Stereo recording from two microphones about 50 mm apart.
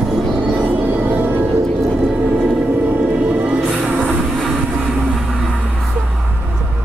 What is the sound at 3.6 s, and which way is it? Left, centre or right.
Music, right.